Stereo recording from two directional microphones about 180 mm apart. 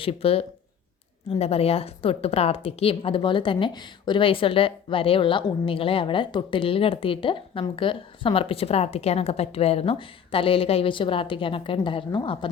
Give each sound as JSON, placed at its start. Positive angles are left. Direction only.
{"t": 0.0, "sound": "a woman's voice", "side_deg": 30}